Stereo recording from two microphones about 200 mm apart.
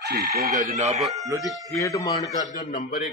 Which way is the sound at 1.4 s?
Centre (ahead or behind).